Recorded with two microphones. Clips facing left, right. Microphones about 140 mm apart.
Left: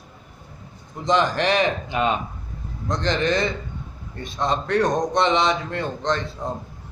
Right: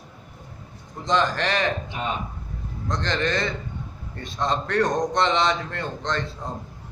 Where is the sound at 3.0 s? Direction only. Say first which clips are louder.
Left 4 dB; 15° left (ahead or behind).